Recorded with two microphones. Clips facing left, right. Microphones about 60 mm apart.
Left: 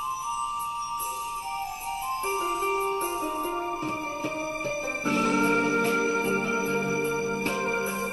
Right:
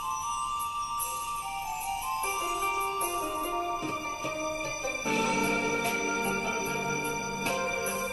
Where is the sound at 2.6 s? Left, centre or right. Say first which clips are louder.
Left 3 dB; left.